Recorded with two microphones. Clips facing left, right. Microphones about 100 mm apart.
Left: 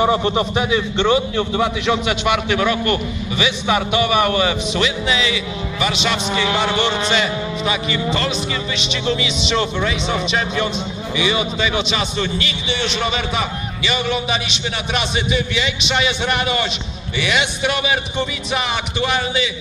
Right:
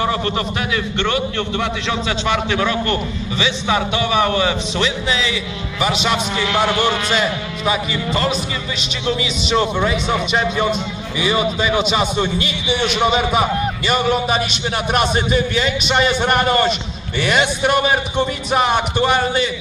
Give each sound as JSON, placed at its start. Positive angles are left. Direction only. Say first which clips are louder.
{"t": 0.0, "sound": "a man's voice", "louder": "left 3 dB", "side_deg": 20}
{"t": 13.3, "sound": "a man's voice", "louder": "right 6 dB", "side_deg": -45}